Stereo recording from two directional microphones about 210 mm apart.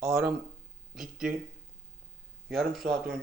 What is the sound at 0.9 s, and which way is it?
Speech, centre (ahead or behind).